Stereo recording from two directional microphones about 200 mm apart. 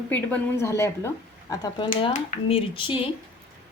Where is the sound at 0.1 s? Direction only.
10° left (ahead or behind).